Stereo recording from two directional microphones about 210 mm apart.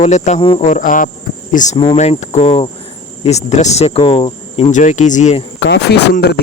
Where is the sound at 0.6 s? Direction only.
40° left (ahead or behind).